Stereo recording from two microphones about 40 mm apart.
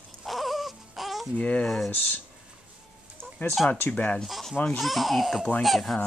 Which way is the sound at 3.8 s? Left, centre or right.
Left.